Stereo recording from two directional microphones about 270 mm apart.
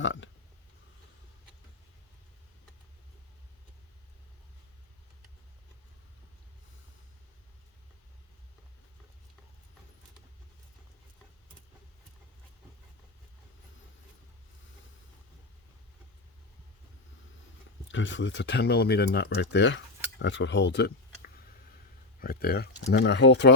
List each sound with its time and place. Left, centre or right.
0.0 s speech: left
17.8 s speech: left